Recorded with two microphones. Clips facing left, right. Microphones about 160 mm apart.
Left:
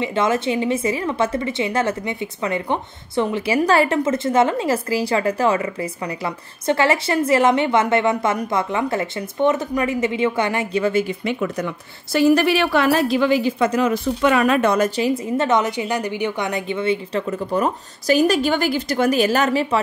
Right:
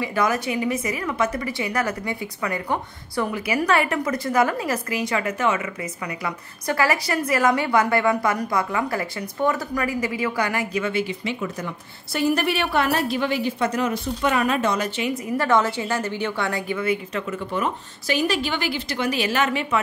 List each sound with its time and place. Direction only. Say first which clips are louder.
0.0 s a woman's voice: left 3 dB; 25° left (ahead or behind)
10.9 s speech: left 5 dB; 45° left (ahead or behind)
11.4 s a woman's voice: left 5 dB; 75° left (ahead or behind)
14.2 s speech: left 5 dB; 85° left; by 14.9 s 60° left (ahead or behind)
15.0 s a woman's voice: left 5 dB; 30° left (ahead or behind)